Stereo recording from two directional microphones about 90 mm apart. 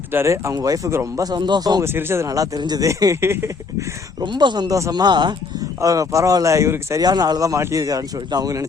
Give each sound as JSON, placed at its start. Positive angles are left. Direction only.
{"t": 0.1, "sound": "speech", "side_deg": -30}
{"t": 1.8, "sound": "speech", "side_deg": -25}
{"t": 4.2, "sound": "speech", "side_deg": -55}
{"t": 4.7, "sound": "speech", "side_deg": -45}
{"t": 5.8, "sound": "speech", "side_deg": -40}
{"t": 7.0, "sound": "speech", "side_deg": -50}